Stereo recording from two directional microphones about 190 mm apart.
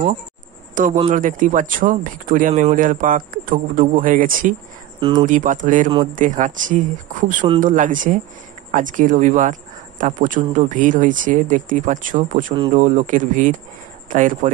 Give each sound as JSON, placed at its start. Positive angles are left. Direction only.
{"t": 0.8, "sound": "speech", "side_deg": -45}